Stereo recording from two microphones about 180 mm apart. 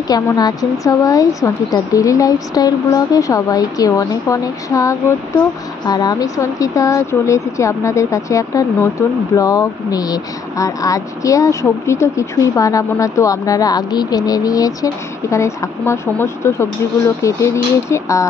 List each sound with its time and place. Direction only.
0.1 s a woman's voice: 20° left (ahead or behind)